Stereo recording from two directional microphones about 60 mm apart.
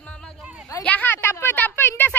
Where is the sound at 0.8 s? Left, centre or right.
Left.